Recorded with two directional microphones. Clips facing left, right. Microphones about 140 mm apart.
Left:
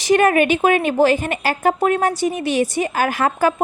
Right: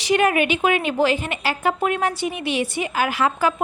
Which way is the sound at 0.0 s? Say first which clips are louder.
Left 4 dB; 45° left (ahead or behind).